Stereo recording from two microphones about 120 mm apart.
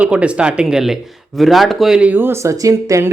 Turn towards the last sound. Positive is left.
turn(degrees=-25)  # may be behind; listen again after turning